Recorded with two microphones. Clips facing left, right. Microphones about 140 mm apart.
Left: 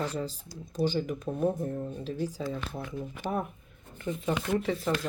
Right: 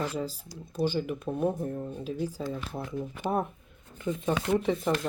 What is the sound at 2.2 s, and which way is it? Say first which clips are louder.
Speech: left 1 dB; 15° left (ahead or behind).